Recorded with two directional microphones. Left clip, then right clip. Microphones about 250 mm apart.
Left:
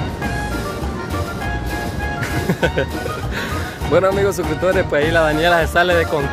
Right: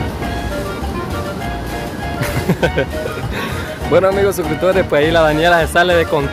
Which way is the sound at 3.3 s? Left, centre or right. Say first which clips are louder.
Right 2 dB; centre.